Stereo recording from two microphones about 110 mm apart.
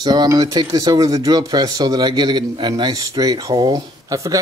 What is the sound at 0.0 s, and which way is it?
Speech, 40° right (ahead or behind).